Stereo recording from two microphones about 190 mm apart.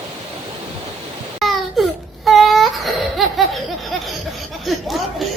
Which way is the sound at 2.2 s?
Centre (ahead or behind).